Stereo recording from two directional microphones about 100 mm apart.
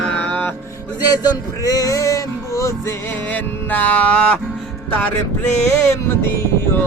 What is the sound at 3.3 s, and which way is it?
Music, 15° left (ahead or behind).